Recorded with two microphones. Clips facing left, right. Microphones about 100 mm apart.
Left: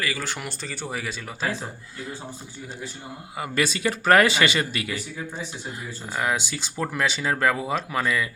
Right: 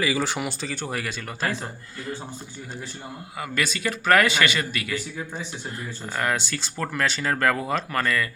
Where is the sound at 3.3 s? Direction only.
25° left (ahead or behind).